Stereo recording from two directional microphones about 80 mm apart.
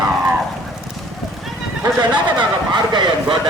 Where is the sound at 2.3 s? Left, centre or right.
Right.